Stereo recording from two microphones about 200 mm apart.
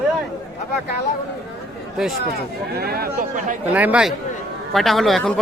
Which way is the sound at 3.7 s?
5° right (ahead or behind).